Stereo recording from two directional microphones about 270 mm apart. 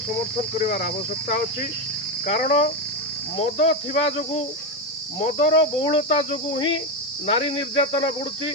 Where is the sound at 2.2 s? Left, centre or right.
Left.